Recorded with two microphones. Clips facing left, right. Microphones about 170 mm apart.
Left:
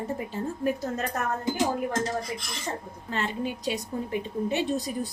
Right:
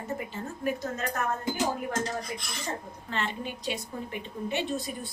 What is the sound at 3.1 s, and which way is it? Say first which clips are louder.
A woman's voice: left 3 dB; 40° left (ahead or behind).